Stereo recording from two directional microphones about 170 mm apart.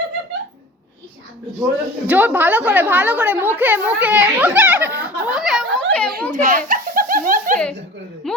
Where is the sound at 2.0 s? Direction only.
10° right (ahead or behind).